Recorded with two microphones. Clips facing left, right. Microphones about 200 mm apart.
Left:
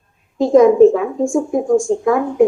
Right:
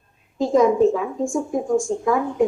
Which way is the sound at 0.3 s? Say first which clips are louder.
Left 7 dB; 60° left (ahead or behind).